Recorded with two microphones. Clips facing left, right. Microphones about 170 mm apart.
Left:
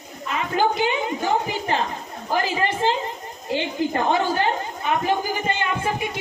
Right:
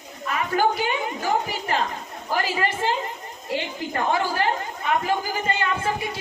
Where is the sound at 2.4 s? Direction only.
20° left (ahead or behind).